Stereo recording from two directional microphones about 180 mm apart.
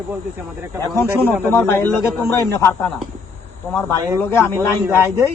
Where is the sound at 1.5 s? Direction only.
10° left (ahead or behind).